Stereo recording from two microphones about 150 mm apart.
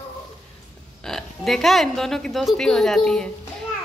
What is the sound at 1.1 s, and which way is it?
A woman's voice, 5° left (ahead or behind).